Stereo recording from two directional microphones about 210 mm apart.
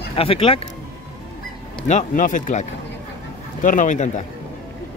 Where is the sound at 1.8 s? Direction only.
35° left (ahead or behind).